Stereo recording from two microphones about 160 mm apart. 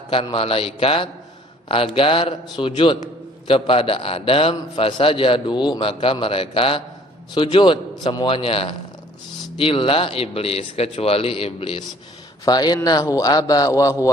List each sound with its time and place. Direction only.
0.1 s a man's voice: 35° left (ahead or behind)